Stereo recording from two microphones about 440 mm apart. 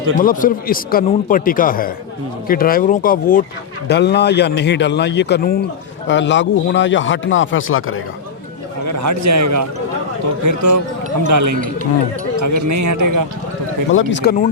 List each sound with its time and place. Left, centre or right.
0.2 s a man's voice: centre
8.8 s a man's voice: right
13.9 s a man's voice: left